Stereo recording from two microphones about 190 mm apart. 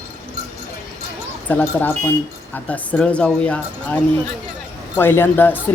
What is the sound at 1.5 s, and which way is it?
A man's voice, 10° left (ahead or behind).